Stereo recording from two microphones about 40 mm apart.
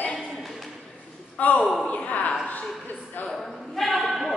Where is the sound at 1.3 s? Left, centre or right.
Left.